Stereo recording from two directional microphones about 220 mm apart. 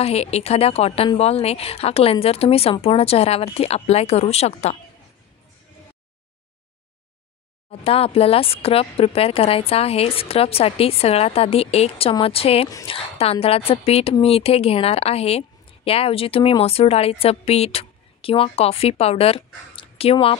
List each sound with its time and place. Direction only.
0.0 s a woman's voice: 30° left (ahead or behind)
7.8 s a woman's voice: 25° left (ahead or behind)